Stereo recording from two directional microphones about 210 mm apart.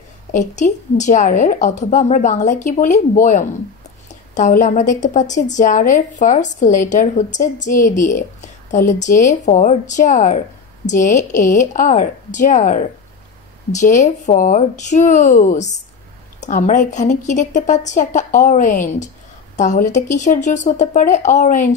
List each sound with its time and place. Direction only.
0.3 s speech: 35° left (ahead or behind)